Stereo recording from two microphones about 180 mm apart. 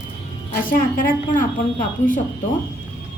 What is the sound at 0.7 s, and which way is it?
A woman's voice, 50° left (ahead or behind).